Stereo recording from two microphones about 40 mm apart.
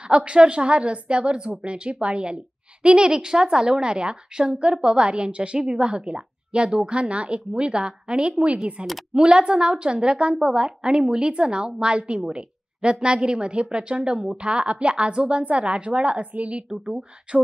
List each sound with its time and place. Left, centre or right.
0.1 s a woman's voice: right